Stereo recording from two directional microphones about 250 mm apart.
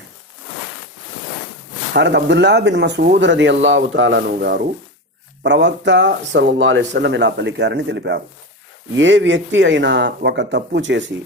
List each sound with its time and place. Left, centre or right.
1.9 s speech: right